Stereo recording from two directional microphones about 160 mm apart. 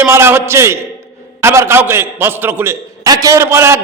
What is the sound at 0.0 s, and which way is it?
A man's voice, 15° right (ahead or behind).